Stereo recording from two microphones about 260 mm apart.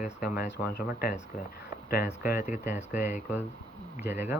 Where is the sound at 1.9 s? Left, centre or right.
Left.